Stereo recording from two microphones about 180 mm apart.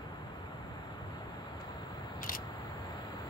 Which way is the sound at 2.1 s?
50° left (ahead or behind).